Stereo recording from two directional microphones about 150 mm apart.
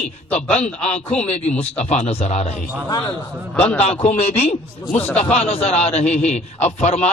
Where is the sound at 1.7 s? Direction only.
50° left (ahead or behind).